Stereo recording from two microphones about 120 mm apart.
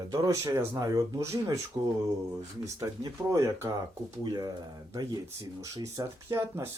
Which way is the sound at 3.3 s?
30° right (ahead or behind).